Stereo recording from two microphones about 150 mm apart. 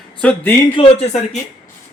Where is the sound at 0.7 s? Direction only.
40° left (ahead or behind).